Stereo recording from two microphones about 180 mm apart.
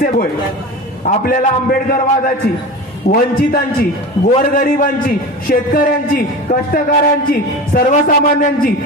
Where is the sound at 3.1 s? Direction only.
55° left (ahead or behind).